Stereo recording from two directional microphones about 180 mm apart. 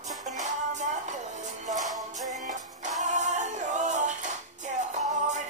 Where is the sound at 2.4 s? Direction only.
40° right (ahead or behind).